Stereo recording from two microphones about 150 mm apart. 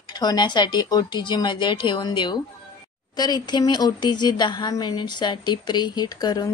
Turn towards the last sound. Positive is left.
turn(degrees=25)  # may be behind; listen again after turning